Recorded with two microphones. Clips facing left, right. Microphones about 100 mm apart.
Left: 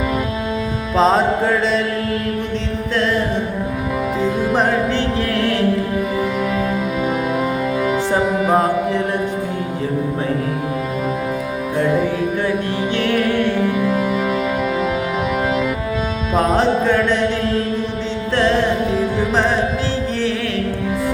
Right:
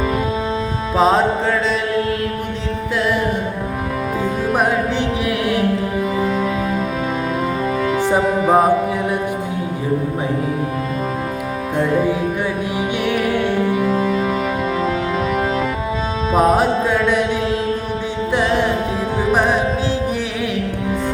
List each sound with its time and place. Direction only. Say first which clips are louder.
0.9 s music: even; 5° right (ahead or behind)
4.2 s music: left 1 dB; 15° right (ahead or behind)
7.8 s music: even; 10° left (ahead or behind)
8.1 s music: right 2 dB; 15° right (ahead or behind)
13.0 s music: left 2 dB; 10° right (ahead or behind)
14.0 s music: right 1 dB; 10° left (ahead or behind)
16.3 s music: right 1 dB; 10° right (ahead or behind)
18.3 s music: left 2 dB; 10° right (ahead or behind)